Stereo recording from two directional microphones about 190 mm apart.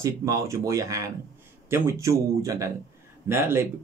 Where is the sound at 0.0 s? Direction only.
15° right (ahead or behind).